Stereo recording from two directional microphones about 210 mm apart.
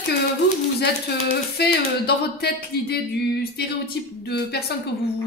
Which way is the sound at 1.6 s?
50° left (ahead or behind).